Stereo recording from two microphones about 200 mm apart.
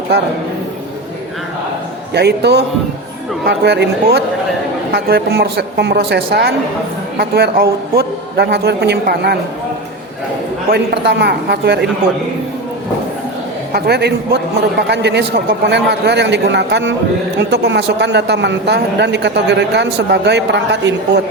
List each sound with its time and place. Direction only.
2.1 s a woman's voice: 55° right (ahead or behind)
10.7 s a woman's voice: 55° right (ahead or behind)
13.7 s a woman's voice: 55° right (ahead or behind)